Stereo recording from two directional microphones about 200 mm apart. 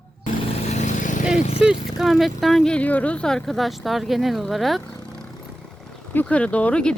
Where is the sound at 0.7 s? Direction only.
35° left (ahead or behind).